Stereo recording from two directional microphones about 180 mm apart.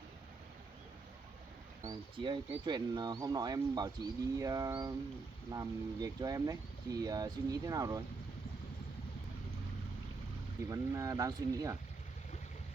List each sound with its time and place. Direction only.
1.8 s speech: 25° right (ahead or behind)
10.7 s speech: 20° right (ahead or behind)